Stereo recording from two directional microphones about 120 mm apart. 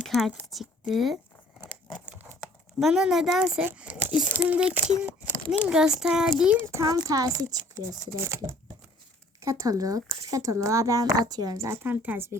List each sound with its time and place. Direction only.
0.0 s a sound: centre (ahead or behind)
0.5 s speech: centre (ahead or behind)
2.7 s speech: 5° right (ahead or behind)
6.7 s speech: 25° right (ahead or behind)